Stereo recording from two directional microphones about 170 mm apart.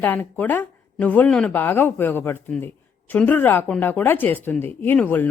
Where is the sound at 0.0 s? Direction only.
10° left (ahead or behind).